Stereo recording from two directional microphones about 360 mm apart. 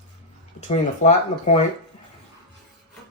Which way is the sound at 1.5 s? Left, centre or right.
Centre.